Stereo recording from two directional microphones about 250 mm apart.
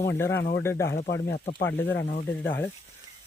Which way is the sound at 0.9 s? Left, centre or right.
Left.